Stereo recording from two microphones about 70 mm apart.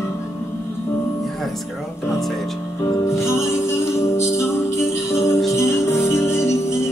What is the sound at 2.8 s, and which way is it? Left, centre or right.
Music, left.